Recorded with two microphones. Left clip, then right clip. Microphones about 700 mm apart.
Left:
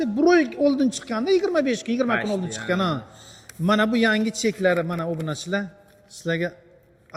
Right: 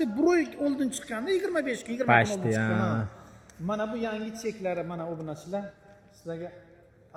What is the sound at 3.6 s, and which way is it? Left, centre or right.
A man's voice, left.